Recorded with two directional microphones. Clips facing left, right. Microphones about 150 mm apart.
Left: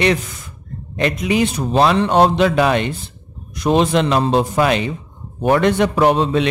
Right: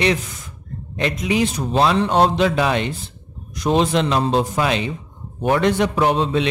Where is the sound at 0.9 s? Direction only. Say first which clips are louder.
Left 3 dB; 55° left (ahead or behind).